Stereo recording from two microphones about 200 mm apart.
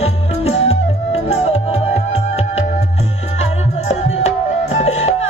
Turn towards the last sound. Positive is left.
turn(degrees=35)  # may be behind; listen again after turning